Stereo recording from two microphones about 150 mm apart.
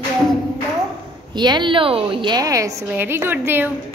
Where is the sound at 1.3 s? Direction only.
30° right (ahead or behind); by 3.7 s 15° right (ahead or behind).